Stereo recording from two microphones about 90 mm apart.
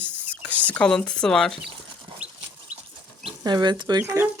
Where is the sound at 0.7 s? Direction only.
10° left (ahead or behind).